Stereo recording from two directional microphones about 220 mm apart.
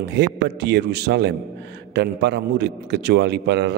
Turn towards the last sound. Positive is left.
turn(degrees=-50)  # may be behind; listen again after turning